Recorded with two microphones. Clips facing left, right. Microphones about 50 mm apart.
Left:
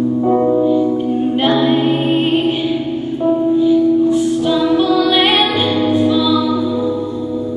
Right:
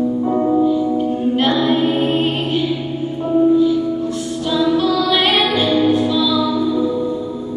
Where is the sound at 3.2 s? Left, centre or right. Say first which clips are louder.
Even; centre.